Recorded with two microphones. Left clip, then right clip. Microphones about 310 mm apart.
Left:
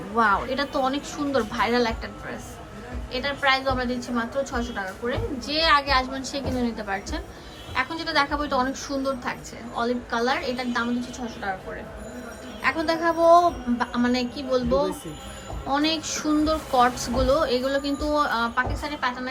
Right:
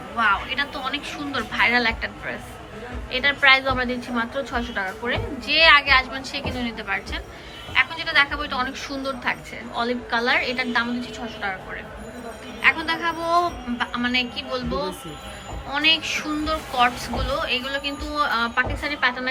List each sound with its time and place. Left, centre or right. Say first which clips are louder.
0.2 s a woman's voice: right 1 dB; centre
3.1 s a woman's voice: right 6 dB; centre
12.6 s a woman's voice: right 2 dB; centre